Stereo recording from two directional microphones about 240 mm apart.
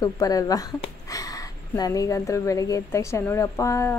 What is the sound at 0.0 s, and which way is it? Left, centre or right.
Speech, centre.